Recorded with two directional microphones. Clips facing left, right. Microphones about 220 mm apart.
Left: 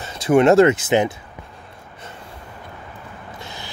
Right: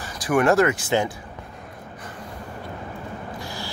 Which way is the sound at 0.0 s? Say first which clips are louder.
Left 6 dB; 25° left (ahead or behind).